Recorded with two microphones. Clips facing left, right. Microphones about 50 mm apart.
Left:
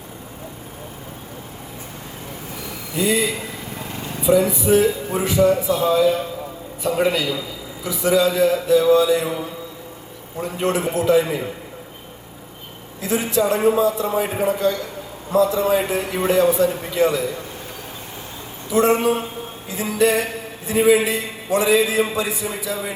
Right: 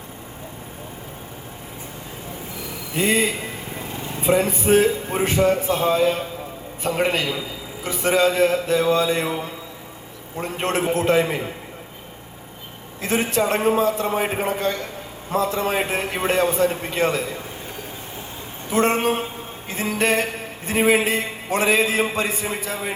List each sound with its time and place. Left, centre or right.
2.9 s a man's voice: right
13.0 s a man's voice: right
18.7 s a man's voice: right